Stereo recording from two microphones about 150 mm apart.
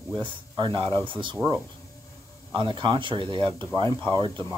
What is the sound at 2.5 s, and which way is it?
Speech, 30° right (ahead or behind).